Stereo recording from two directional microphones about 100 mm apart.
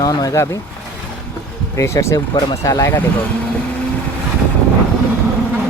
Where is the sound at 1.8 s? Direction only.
30° left (ahead or behind).